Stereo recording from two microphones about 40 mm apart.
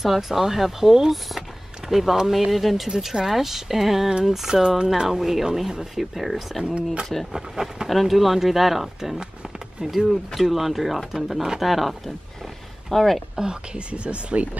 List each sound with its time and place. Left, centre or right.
0.0 s speech: centre
6.6 s speech: right
7.3 s speech: centre
7.9 s speech: centre
9.2 s speech: centre
12.9 s speech: centre
13.4 s speech: centre
13.9 s speech: right